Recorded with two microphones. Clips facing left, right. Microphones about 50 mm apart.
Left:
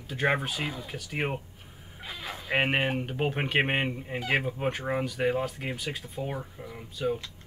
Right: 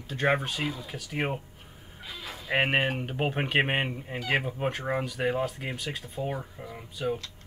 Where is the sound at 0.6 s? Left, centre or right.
Left.